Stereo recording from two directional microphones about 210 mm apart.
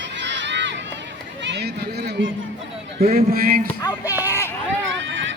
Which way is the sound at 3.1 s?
45° right (ahead or behind).